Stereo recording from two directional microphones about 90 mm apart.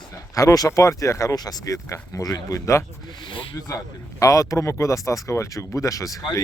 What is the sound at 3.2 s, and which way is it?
Speech, 65° left (ahead or behind).